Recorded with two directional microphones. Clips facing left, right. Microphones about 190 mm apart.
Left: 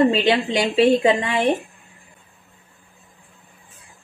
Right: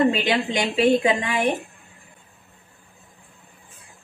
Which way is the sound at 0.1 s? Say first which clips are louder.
Left 4 dB; 30° left (ahead or behind).